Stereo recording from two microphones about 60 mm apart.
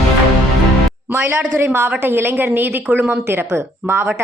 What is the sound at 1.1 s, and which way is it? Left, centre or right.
A woman's voice, right.